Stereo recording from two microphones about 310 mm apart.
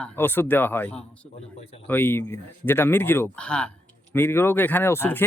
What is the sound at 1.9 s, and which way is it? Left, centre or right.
Speech, centre.